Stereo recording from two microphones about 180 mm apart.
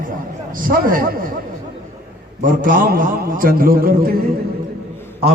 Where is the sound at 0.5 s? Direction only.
50° right (ahead or behind).